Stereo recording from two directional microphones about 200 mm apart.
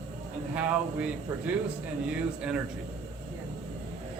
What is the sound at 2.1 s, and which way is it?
Speech, 5° right (ahead or behind).